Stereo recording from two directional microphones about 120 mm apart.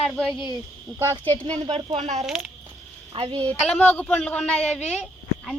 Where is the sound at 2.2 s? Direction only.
5° right (ahead or behind).